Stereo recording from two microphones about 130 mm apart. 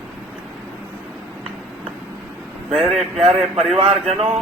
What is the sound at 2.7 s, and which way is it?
Speech, centre (ahead or behind).